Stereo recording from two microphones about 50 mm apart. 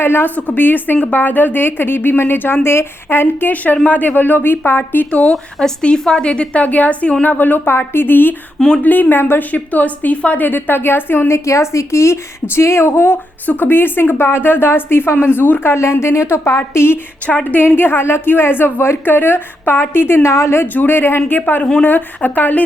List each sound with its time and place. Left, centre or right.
0.0 s a woman's voice: left
3.5 s a woman's voice: left
5.3 s a woman's voice: centre; by 8.4 s left
8.5 s speech: centre
8.8 s a woman's voice: left
11.4 s speech: left
13.4 s speech: left
15.7 s a woman's voice: left
16.6 s speech: left
20.2 s speech: left
20.7 s a woman's voice: left